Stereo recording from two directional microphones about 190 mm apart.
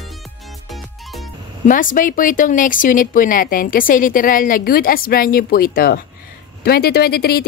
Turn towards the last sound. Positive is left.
turn(degrees=55)  # may be behind; listen again after turning